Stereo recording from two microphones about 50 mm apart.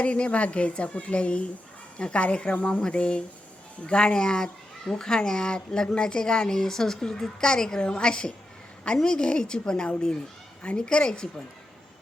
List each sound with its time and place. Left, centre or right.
0.0 s a woman's voice: left